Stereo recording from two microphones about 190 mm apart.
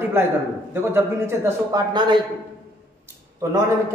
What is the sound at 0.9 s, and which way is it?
Speech, 15° right (ahead or behind).